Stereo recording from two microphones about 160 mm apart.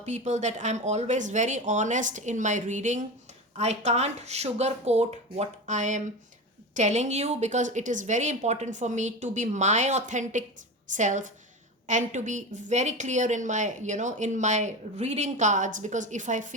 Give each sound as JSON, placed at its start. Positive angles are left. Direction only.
{"t": 0.0, "sound": "a woman's voice", "side_deg": -45}